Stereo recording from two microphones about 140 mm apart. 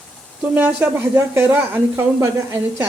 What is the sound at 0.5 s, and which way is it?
Speech, 10° right (ahead or behind).